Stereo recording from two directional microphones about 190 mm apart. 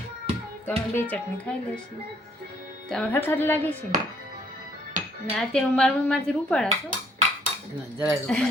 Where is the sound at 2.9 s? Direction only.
10° left (ahead or behind).